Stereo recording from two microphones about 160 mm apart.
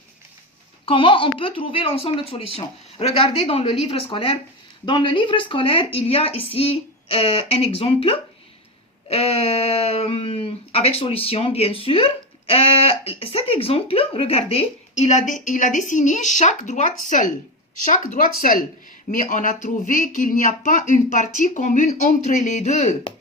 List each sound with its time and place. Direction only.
0.9 s speech: 30° left (ahead or behind); by 17.3 s 55° left (ahead or behind)
18.3 s speech: 60° left (ahead or behind)